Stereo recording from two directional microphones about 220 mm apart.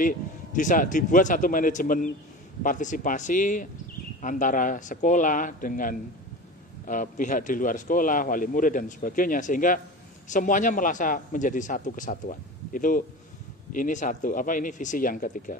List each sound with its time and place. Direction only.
0.0 s a man's voice: 35° left (ahead or behind)